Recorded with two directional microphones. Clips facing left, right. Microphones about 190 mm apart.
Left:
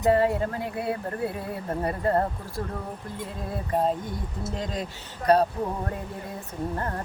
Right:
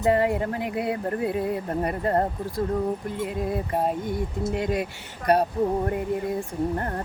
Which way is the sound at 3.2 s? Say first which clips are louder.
Right 4 dB; 15° right (ahead or behind).